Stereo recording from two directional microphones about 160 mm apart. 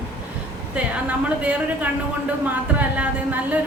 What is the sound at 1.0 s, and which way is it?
Speech, 10° right (ahead or behind).